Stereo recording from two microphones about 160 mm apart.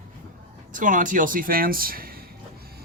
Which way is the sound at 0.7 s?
55° right (ahead or behind).